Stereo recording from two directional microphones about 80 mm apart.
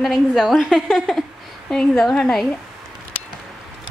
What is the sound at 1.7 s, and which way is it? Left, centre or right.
Speech, centre.